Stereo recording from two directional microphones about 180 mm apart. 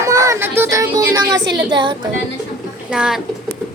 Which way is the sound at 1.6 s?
25° right (ahead or behind).